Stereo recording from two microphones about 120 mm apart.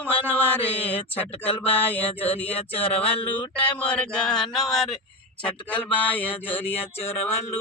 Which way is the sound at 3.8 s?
10° left (ahead or behind).